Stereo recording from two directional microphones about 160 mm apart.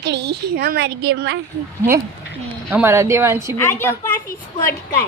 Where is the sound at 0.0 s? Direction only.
90° right.